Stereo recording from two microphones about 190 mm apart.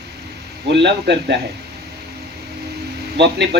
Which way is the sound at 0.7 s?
65° right (ahead or behind).